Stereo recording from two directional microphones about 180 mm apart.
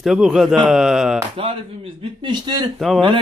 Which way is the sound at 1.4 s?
30° right (ahead or behind).